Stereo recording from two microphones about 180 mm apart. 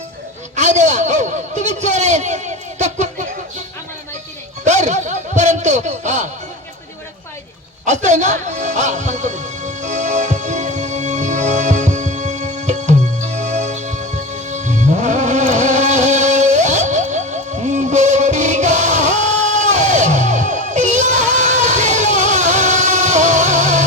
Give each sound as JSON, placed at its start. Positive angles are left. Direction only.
{"t": 0.5, "sound": "a man's voice", "side_deg": -40}
{"t": 4.6, "sound": "music", "side_deg": -40}
{"t": 7.9, "sound": "music", "side_deg": -40}